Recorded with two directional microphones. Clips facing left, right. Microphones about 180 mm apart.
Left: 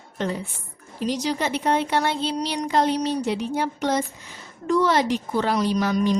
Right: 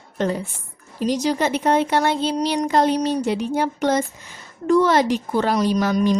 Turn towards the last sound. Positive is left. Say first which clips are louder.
# right 3 dB
turn(degrees=-45)  # may be behind; listen again after turning